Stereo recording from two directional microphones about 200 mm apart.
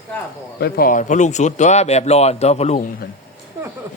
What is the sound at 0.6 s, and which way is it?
A man's voice, 50° left (ahead or behind).